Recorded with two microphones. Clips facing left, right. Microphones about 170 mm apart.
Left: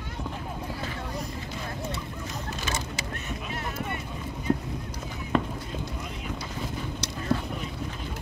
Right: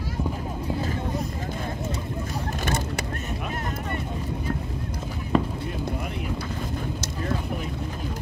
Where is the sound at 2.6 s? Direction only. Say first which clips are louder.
Right 6 dB; 55° right (ahead or behind).